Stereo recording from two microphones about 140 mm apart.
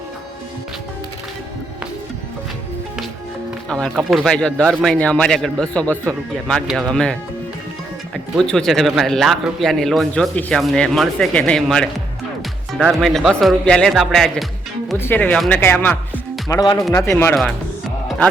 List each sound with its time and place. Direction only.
3.7 s speech: 5° left (ahead or behind)
14.9 s speech: 15° left (ahead or behind)
16.5 s speech: 25° left (ahead or behind)